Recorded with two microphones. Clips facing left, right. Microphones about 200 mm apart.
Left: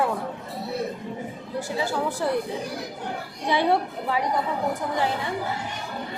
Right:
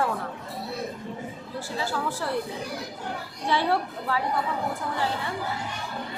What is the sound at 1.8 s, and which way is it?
Speech, 15° left (ahead or behind).